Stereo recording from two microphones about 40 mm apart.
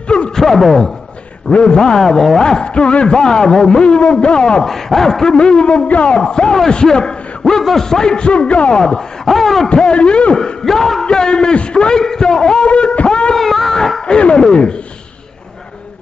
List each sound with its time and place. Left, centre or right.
0.4 s a man's voice: centre
1.5 s a man's voice: left
2.6 s a man's voice: left
3.8 s a man's voice: left
4.6 s a man's voice: centre
8.3 s a man's voice: left
9.2 s a sound: centre
9.8 s a man's voice: left
10.3 s a man's voice: centre
11.1 s a man's voice: centre
12.6 s a sound: left
13.3 s a sound: centre
14.1 s a man's voice: left